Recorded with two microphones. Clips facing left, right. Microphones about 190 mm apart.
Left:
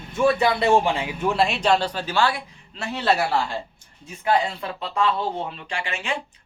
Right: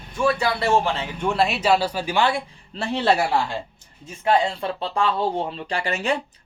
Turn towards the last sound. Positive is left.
turn(degrees=-40)  # may be behind; listen again after turning